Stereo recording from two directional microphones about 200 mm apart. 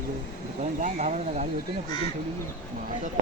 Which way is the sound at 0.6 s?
35° right (ahead or behind).